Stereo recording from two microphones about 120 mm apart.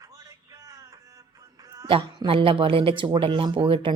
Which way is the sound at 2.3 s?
45° right (ahead or behind).